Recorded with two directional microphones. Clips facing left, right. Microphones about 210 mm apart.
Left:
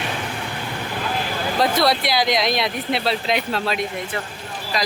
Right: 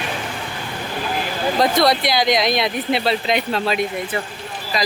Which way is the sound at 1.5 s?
5° left (ahead or behind).